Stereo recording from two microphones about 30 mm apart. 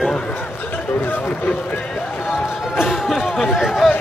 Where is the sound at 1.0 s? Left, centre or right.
Left.